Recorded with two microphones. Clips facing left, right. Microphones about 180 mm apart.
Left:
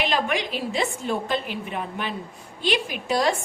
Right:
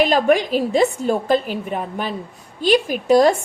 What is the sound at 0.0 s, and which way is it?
A woman's voice, 40° right (ahead or behind).